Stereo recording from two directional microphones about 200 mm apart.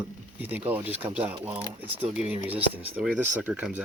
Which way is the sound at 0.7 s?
10° right (ahead or behind).